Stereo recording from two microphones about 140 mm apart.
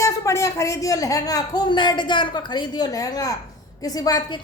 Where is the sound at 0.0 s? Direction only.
20° left (ahead or behind).